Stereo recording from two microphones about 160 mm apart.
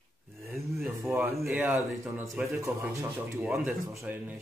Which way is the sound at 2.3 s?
Centre (ahead or behind).